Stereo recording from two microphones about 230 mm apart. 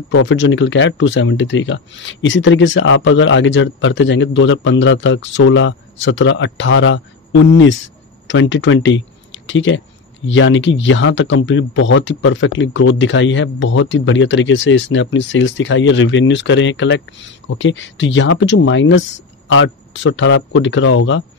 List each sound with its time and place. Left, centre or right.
0.3 s speech: left